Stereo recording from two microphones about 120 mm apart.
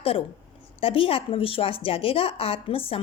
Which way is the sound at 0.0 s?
50° left (ahead or behind).